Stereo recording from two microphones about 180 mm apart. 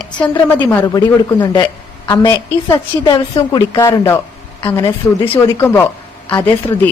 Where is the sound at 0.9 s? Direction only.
20° left (ahead or behind).